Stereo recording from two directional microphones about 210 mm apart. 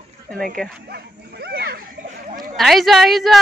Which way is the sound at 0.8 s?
50° right (ahead or behind).